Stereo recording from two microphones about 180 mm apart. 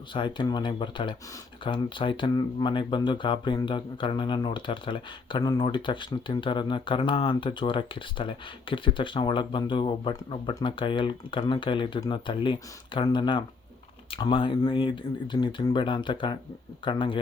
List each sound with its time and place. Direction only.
0.1 s speech: 25° left (ahead or behind)